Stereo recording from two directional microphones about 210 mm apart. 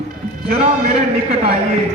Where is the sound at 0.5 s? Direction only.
35° right (ahead or behind).